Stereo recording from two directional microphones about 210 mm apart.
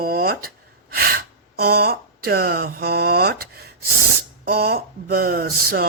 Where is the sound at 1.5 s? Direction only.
50° right (ahead or behind).